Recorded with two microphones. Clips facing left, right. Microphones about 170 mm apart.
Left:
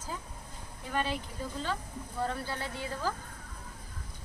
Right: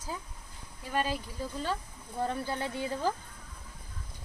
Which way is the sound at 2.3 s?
20° right (ahead or behind).